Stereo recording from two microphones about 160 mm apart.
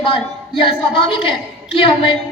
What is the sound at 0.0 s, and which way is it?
A woman's voice, 30° left (ahead or behind).